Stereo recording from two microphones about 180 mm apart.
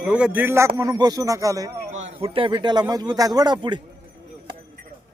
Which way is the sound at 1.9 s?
35° right (ahead or behind).